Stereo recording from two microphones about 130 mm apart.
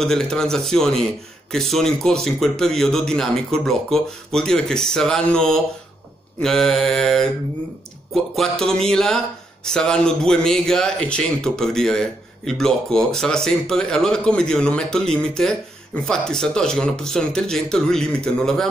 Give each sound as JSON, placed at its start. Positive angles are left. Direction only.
{"t": 0.0, "sound": "speech", "side_deg": 5}